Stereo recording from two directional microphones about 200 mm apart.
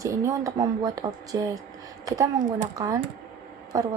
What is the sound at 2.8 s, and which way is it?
A woman's voice, 15° right (ahead or behind).